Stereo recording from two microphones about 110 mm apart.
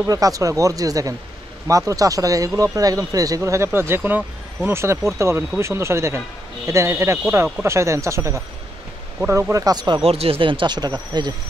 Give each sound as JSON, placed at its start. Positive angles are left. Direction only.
{"t": 0.0, "sound": "speech", "side_deg": -30}
{"t": 10.0, "sound": "speech", "side_deg": -60}